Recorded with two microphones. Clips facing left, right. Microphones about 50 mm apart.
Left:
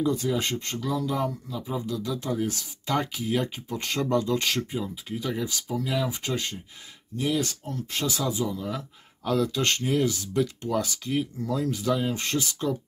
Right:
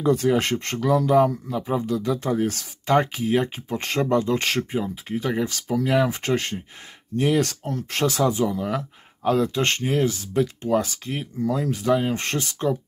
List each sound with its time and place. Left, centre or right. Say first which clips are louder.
0.0 s speech: right 6 dB; right
2.9 s speech: right 7 dB; right
9.3 s speech: right 4 dB; right